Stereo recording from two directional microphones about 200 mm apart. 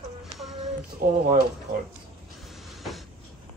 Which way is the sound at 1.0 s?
50° right (ahead or behind).